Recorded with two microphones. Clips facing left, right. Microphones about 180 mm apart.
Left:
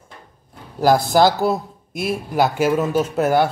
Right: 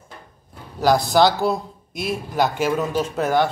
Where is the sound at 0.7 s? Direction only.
10° left (ahead or behind).